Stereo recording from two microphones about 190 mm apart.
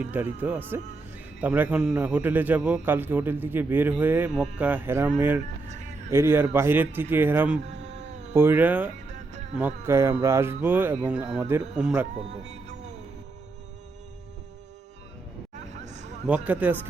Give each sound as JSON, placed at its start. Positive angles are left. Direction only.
{"t": 0.0, "sound": "a man's voice", "side_deg": -10}
{"t": 8.0, "sound": "cat", "side_deg": -40}
{"t": 8.3, "sound": "a man's voice", "side_deg": -10}
{"t": 12.3, "sound": "music", "side_deg": -35}
{"t": 15.8, "sound": "a sound", "side_deg": -40}
{"t": 16.2, "sound": "a man's voice", "side_deg": -5}